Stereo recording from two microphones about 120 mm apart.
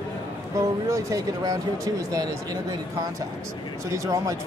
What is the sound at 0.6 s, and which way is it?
A man's voice, 25° right (ahead or behind).